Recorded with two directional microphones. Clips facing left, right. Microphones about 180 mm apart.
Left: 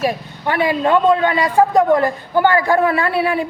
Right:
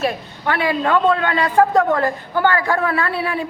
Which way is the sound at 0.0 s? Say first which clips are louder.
Left 2 dB; 15° left (ahead or behind).